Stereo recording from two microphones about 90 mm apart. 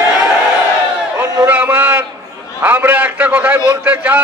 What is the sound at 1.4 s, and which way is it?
A man's voice, 20° right (ahead or behind).